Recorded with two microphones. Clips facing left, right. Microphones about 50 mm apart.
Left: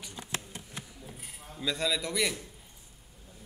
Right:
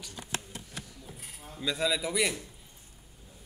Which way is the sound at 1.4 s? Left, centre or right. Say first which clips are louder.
Right 1 dB; centre.